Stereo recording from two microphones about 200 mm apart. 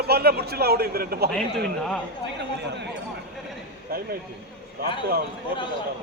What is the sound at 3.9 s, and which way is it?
Speech, 50° right (ahead or behind).